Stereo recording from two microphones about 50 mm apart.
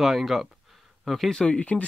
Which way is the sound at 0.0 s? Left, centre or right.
Centre.